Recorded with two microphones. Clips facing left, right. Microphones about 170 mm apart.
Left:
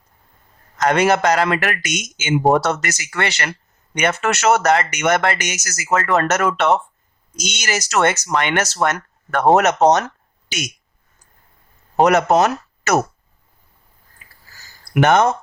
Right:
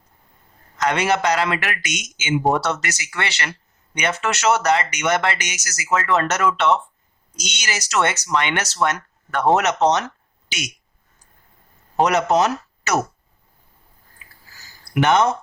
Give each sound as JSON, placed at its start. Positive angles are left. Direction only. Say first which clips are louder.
{"t": 0.8, "sound": "speech", "louder": "left 4 dB", "side_deg": 50}
{"t": 11.9, "sound": "speech", "louder": "left 3 dB", "side_deg": 50}
{"t": 14.9, "sound": "speech", "louder": "left 3 dB", "side_deg": 50}